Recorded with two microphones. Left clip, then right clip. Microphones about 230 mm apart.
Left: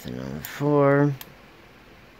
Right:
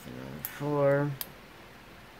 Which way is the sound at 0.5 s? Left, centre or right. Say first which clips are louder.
Left 7 dB; left.